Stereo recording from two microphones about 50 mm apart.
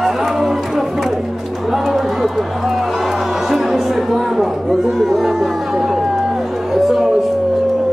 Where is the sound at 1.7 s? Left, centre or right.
Centre.